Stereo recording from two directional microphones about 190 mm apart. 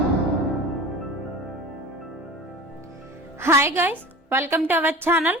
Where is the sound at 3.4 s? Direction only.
15° right (ahead or behind).